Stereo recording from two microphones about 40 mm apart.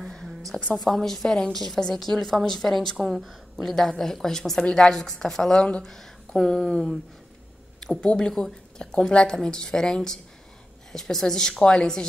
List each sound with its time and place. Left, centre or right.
0.1 s a sound: centre
0.7 s a woman's voice: centre
3.0 s speech: centre
4.0 s a woman's voice: centre
5.6 s speech: left
5.9 s speech: centre
8.0 s speech: left
8.3 s speech: centre
8.7 s a woman's voice: left